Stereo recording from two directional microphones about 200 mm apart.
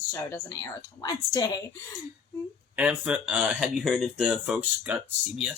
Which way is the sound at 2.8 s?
5° right (ahead or behind).